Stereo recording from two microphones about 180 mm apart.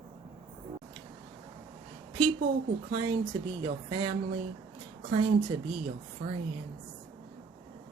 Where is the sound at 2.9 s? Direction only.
25° right (ahead or behind).